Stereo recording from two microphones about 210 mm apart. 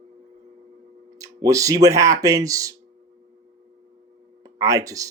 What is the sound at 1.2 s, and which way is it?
Speech, 15° right (ahead or behind).